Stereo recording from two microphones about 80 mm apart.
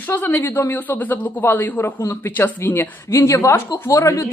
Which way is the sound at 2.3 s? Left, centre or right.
Left.